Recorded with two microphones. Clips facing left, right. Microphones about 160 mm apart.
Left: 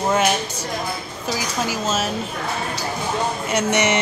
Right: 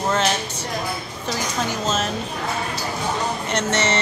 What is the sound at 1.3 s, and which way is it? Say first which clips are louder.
Speech: left 1 dB; 5° left (ahead or behind).